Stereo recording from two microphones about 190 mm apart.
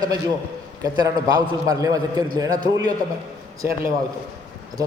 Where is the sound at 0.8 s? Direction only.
20° right (ahead or behind).